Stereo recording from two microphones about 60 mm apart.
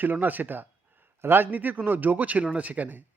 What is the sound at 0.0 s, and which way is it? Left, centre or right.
Speech, right.